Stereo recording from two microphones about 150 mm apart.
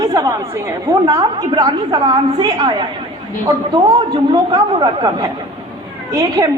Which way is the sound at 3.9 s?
35° right (ahead or behind).